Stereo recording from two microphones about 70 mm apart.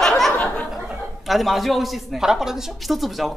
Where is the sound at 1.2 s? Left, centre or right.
Centre.